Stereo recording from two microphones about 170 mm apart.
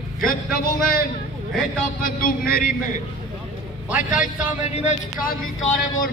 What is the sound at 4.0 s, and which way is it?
Speech, 50° left (ahead or behind).